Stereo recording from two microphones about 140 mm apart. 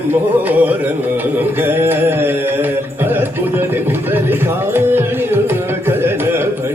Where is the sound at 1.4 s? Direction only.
15° right (ahead or behind).